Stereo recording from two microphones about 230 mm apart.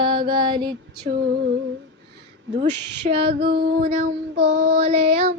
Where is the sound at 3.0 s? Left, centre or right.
Right.